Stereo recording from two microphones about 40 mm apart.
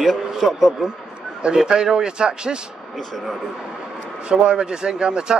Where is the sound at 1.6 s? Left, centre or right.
Centre.